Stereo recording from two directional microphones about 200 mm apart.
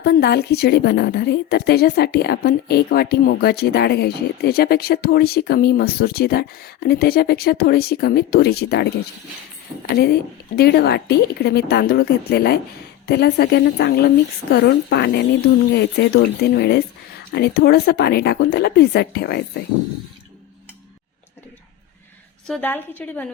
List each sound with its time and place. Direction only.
0.0 s a woman's voice: 55° left (ahead or behind)
22.4 s a woman's voice: 5° left (ahead or behind)